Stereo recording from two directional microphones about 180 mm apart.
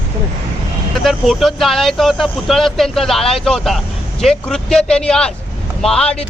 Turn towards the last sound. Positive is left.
turn(degrees=5)  # may be behind; listen again after turning